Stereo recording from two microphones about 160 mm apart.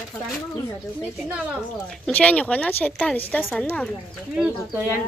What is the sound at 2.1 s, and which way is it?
Speech, 10° left (ahead or behind).